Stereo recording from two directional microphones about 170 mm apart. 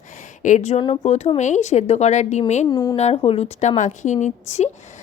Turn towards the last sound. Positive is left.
turn(degrees=45)  # may be behind; listen again after turning